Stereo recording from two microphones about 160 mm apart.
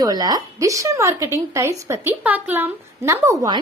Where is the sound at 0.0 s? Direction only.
25° right (ahead or behind).